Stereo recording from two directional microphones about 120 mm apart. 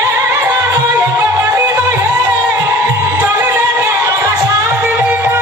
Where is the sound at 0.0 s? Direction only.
20° right (ahead or behind).